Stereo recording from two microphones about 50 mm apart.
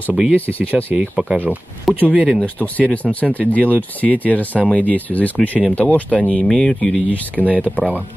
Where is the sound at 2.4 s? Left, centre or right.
Left.